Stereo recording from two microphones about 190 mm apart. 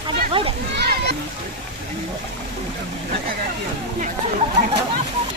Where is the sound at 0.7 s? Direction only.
60° right (ahead or behind).